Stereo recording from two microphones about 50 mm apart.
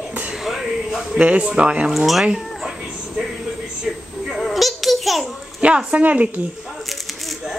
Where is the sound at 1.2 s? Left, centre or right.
Right.